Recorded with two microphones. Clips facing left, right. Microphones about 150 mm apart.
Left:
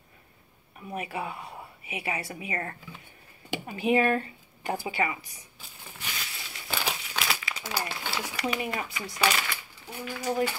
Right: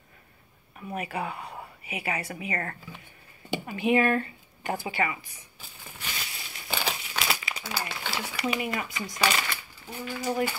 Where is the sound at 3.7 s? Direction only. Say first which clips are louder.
Even; 35° left (ahead or behind).